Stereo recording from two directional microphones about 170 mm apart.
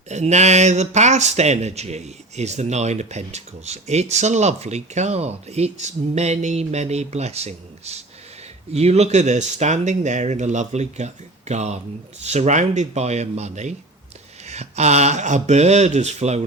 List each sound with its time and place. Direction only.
0.1 s speech: 40° right (ahead or behind)